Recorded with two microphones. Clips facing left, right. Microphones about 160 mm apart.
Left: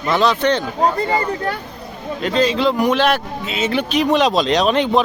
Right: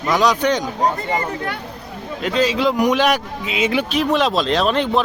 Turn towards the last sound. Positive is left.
turn(degrees=0)  # may be behind; listen again after turning